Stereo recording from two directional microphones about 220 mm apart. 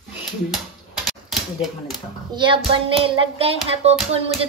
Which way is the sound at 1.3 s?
Centre (ahead or behind).